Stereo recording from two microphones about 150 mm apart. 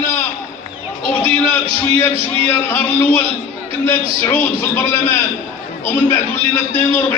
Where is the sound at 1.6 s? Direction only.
40° right (ahead or behind).